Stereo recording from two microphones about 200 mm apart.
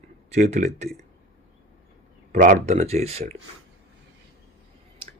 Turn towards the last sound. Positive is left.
turn(degrees=-30)  # may be behind; listen again after turning